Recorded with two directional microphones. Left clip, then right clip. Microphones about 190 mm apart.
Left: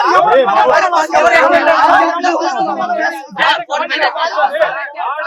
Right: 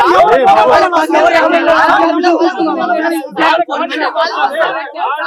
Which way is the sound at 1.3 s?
25° right (ahead or behind).